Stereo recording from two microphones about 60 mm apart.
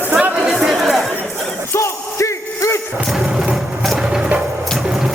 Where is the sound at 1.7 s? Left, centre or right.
Left.